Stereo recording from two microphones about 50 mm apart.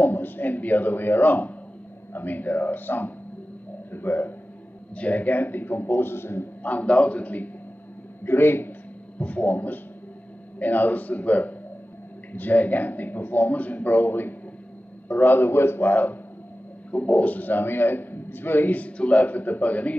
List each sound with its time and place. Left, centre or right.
0.0 s a man's voice: left
4.9 s a man's voice: left
6.6 s a man's voice: left
8.3 s a man's voice: left
9.2 s a man's voice: left
15.9 s a man's voice: left